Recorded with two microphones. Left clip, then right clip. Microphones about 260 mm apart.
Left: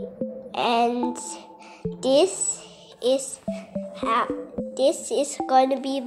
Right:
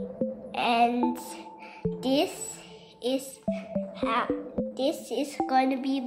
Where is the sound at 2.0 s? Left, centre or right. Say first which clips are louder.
Left 8 dB; centre.